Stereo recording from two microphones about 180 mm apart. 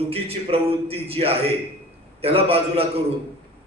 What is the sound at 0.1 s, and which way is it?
A man's voice, 35° right (ahead or behind).